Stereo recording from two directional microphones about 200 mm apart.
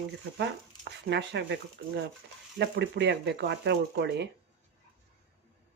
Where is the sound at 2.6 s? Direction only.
60° right (ahead or behind).